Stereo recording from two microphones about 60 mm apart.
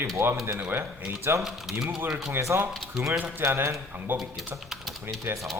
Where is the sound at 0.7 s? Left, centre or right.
Right.